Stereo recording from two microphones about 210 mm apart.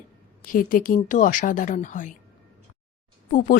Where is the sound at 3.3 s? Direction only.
40° left (ahead or behind).